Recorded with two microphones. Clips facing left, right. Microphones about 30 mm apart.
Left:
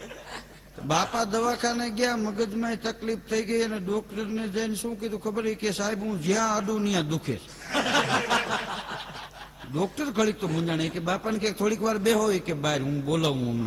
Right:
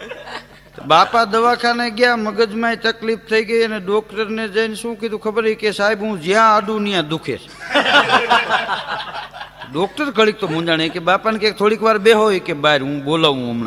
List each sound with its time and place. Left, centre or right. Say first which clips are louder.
0.9 s a man's voice: right 13 dB; right